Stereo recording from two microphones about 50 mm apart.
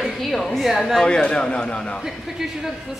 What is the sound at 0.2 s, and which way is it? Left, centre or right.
Speech, centre.